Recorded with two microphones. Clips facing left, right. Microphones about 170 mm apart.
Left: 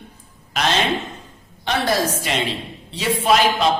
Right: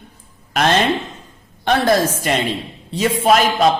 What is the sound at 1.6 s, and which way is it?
A man's voice, 50° right (ahead or behind).